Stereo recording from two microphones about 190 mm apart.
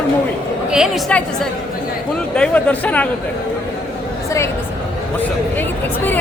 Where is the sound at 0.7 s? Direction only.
5° right (ahead or behind).